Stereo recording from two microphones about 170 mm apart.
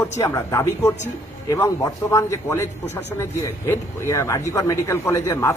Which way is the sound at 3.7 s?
15° left (ahead or behind).